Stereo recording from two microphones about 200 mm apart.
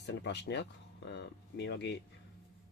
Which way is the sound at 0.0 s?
60° left (ahead or behind).